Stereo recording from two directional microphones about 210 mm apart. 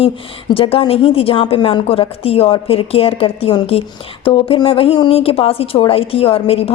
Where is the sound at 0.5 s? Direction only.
25° left (ahead or behind).